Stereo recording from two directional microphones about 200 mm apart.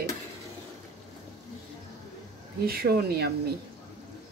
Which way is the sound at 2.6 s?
50° right (ahead or behind).